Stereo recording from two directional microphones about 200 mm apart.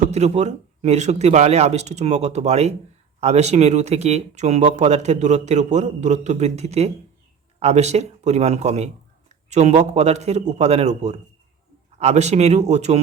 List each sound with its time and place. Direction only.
0.0 s a man's voice: 35° right (ahead or behind)